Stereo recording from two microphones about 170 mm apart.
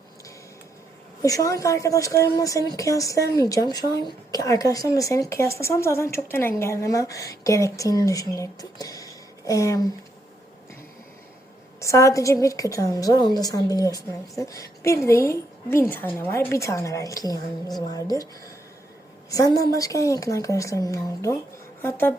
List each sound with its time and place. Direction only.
1.2 s a woman's voice: 20° left (ahead or behind)
11.8 s a woman's voice: 15° left (ahead or behind)
19.3 s a woman's voice: 20° left (ahead or behind)